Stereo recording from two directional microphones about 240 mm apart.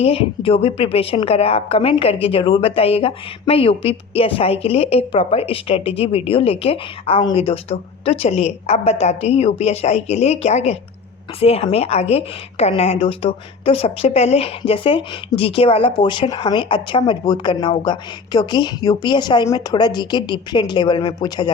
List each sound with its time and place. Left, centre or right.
0.0 s a woman's voice: left